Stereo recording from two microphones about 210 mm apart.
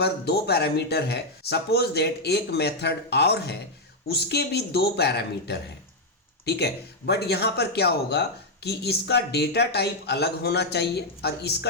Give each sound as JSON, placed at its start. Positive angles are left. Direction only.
{"t": 0.0, "sound": "a man's voice", "side_deg": 50}